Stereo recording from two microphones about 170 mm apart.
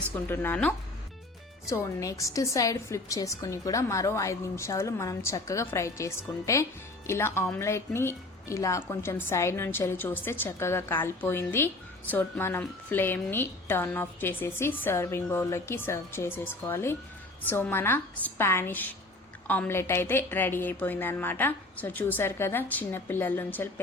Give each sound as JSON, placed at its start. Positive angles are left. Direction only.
{"t": 0.3, "sound": "a woman's voice", "side_deg": 10}